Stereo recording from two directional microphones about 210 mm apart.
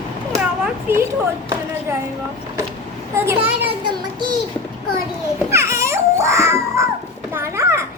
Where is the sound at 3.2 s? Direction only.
10° right (ahead or behind).